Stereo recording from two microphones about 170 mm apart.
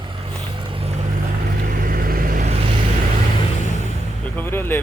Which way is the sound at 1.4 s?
55° right (ahead or behind).